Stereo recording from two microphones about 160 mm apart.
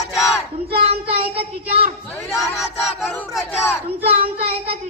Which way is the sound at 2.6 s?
Centre (ahead or behind).